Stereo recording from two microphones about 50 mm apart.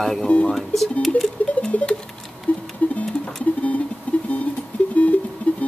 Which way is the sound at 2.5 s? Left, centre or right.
Left.